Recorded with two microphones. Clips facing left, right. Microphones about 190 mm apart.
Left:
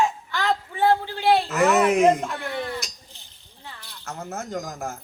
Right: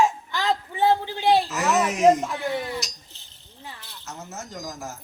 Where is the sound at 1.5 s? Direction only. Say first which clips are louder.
Left 4 dB; 55° left (ahead or behind).